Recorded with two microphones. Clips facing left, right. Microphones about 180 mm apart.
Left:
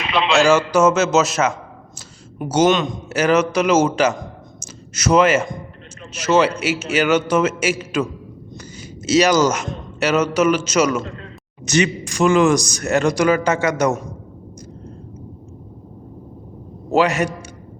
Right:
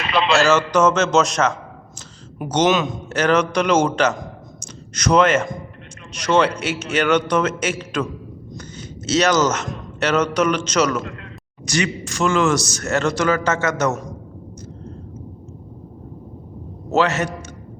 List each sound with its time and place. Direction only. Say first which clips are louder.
0.0 s a man's voice: left 1 dB; centre (ahead or behind)
2.6 s speech: even; 5° right (ahead or behind)
3.1 s a man's voice: left 2 dB; 10° left (ahead or behind)
8.5 s a sound: right 1 dB; 10° left (ahead or behind)
10.0 s a man's voice: left 2 dB; 10° left (ahead or behind)
11.0 s a man's voice: left 1 dB; 25° left (ahead or behind)
16.9 s a man's voice: left 2 dB; 10° left (ahead or behind)